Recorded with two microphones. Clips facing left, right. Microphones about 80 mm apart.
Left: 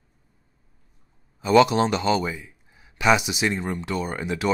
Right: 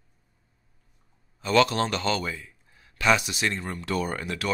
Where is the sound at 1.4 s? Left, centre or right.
Centre.